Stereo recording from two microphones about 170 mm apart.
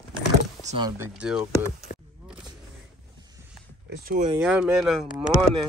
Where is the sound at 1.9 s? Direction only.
55° left (ahead or behind).